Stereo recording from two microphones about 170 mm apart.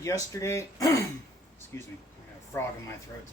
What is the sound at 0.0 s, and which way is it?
Speech, 20° left (ahead or behind).